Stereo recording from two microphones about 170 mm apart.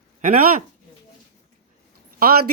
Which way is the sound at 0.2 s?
55° right (ahead or behind).